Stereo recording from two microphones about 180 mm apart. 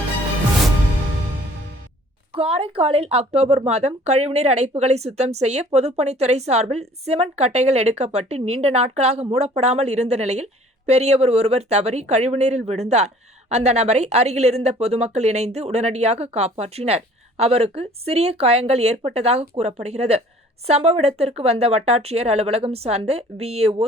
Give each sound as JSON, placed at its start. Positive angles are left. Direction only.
{"t": 2.3, "sound": "a woman's voice", "side_deg": -30}